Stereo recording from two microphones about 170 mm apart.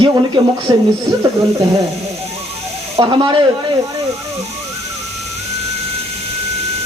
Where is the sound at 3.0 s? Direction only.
25° right (ahead or behind).